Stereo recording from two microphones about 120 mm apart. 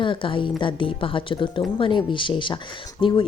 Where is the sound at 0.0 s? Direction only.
45° left (ahead or behind).